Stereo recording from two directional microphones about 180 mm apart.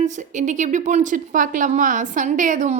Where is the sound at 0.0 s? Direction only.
45° right (ahead or behind).